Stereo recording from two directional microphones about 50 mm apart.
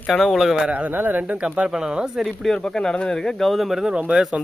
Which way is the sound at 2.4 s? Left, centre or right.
Centre.